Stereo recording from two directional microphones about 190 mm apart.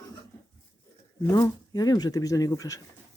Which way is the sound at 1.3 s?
20° left (ahead or behind).